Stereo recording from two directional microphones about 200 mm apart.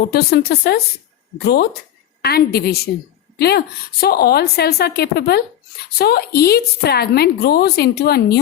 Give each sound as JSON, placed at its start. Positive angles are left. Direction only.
{"t": 0.1, "sound": "a woman's voice", "side_deg": 55}